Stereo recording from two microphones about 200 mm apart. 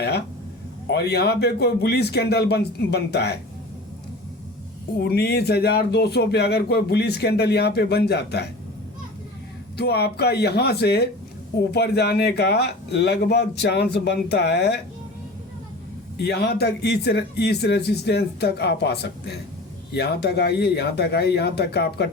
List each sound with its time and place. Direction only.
0.9 s speech: 55° left (ahead or behind)
4.9 s speech: 50° left (ahead or behind)
9.7 s speech: 55° left (ahead or behind)
16.1 s speech: 55° left (ahead or behind)